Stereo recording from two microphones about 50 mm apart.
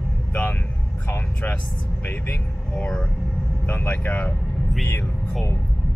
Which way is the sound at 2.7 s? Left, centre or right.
Centre.